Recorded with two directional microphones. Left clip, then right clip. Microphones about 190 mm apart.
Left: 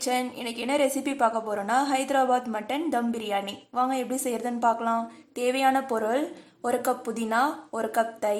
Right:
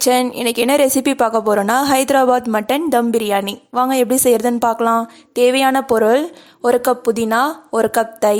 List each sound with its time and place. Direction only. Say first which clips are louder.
0.0 s a woman's voice: right 13 dB; 50° right (ahead or behind)